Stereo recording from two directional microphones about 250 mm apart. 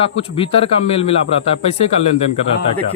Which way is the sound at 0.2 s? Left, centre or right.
Left.